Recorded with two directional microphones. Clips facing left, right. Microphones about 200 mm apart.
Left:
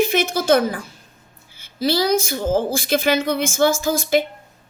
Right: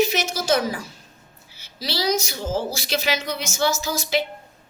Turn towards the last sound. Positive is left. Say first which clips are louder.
# left 6 dB
turn(degrees=50)  # may be behind; listen again after turning